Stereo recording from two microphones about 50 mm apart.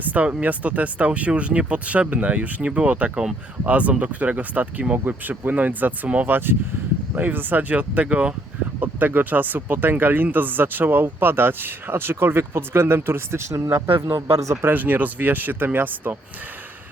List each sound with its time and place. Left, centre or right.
0.1 s speech: right
8.8 s speech: right
14.6 s speech: right